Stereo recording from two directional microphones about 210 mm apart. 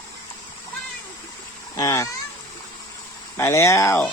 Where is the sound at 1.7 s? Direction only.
15° left (ahead or behind).